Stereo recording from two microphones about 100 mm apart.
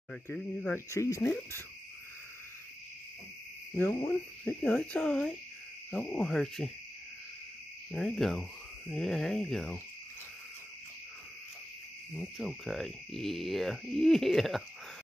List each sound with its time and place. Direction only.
0.1 s owl: 5° left (ahead or behind)
0.7 s speech: 25° left (ahead or behind)
3.7 s owl: 10° left (ahead or behind)
7.9 s speech: 5° left (ahead or behind)
12.2 s speech: centre (ahead or behind)